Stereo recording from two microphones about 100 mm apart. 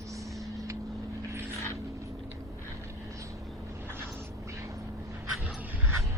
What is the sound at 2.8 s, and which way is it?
Vehicle, 30° right (ahead or behind).